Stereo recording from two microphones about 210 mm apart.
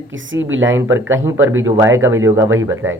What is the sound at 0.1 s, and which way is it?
Speech, 65° right (ahead or behind).